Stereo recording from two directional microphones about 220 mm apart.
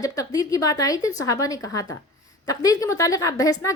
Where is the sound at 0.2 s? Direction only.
15° left (ahead or behind).